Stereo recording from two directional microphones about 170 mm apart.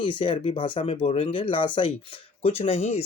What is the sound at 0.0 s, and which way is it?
Speech, 30° left (ahead or behind).